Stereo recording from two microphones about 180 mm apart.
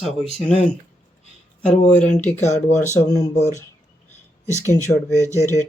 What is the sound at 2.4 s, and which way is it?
Speech, 40° left (ahead or behind).